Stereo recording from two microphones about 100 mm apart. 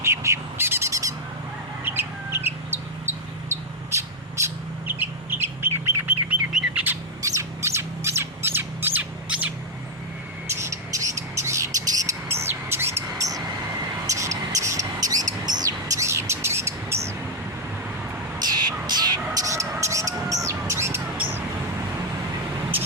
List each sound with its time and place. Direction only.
0.0 s bird: 30° right (ahead or behind)
6.5 s bird: 10° right (ahead or behind)
7.2 s squawk: 30° right (ahead or behind)
10.4 s bird: 25° right (ahead or behind)
14.1 s a sound: 30° right (ahead or behind)
18.3 s a sound: 45° right (ahead or behind)
19.3 s bird: 35° right (ahead or behind)